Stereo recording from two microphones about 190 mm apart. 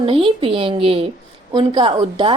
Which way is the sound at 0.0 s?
25° right (ahead or behind).